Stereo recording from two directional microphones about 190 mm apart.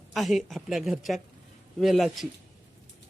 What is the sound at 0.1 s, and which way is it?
A woman's voice, centre (ahead or behind).